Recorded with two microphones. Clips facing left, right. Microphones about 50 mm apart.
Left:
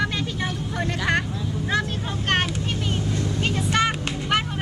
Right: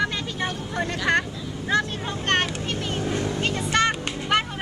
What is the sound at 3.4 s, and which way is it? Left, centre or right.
Music, centre.